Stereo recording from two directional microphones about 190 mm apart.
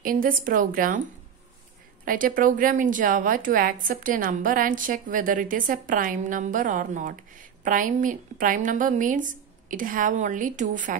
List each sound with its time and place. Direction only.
0.0 s a woman's voice: 45° right (ahead or behind)
2.0 s a woman's voice: 45° right (ahead or behind)